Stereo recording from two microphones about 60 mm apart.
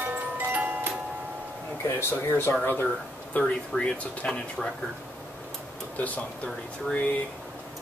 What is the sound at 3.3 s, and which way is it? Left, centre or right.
Speech, centre.